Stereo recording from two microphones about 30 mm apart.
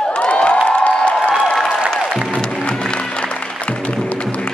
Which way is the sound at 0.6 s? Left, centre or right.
Left.